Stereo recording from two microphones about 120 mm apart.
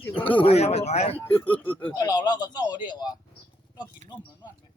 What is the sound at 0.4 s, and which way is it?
Speech, 60° left (ahead or behind).